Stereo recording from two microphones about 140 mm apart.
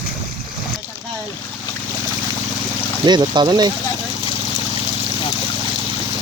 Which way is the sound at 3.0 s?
30° right (ahead or behind).